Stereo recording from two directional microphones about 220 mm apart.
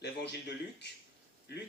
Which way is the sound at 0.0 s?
50° left (ahead or behind).